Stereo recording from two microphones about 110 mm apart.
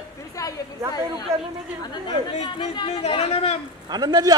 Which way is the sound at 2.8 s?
65° left (ahead or behind).